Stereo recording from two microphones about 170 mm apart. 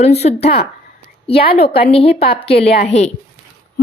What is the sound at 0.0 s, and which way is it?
A woman's voice, 40° left (ahead or behind).